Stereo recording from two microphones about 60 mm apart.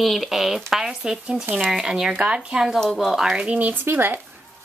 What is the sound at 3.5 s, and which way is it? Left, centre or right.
Speech, right.